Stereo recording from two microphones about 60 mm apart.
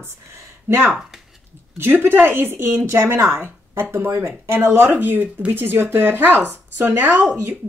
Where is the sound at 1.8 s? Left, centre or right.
Right.